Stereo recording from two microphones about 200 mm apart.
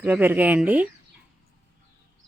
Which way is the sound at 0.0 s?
10° right (ahead or behind).